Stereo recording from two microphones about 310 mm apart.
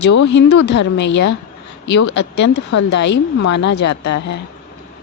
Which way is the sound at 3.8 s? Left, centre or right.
Left.